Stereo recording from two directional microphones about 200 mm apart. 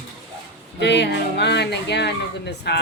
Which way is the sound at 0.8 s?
60° left (ahead or behind).